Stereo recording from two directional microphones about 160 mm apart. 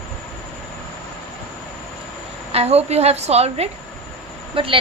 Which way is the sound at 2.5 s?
40° right (ahead or behind).